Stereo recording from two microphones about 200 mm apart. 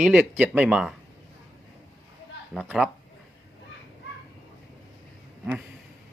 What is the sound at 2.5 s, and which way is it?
Speech, 5° right (ahead or behind).